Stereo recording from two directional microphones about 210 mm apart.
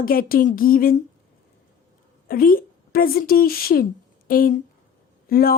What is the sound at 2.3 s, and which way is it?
Speech, 45° left (ahead or behind).